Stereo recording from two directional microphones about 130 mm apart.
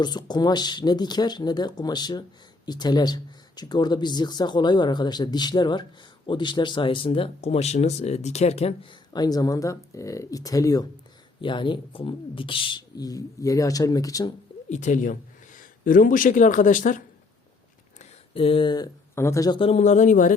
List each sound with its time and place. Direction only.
0.0 s speech: 35° left (ahead or behind)
11.3 s speech: 40° left (ahead or behind)
14.7 s speech: 70° left (ahead or behind)
18.3 s speech: 45° left (ahead or behind)
19.1 s speech: 20° left (ahead or behind)
19.5 s speech: 45° left (ahead or behind)
19.8 s speech: 65° left (ahead or behind)